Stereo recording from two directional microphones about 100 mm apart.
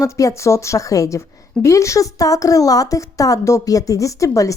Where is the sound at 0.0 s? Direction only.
35° left (ahead or behind).